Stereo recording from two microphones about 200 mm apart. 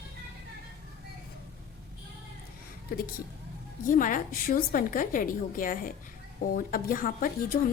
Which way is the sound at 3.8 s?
40° left (ahead or behind).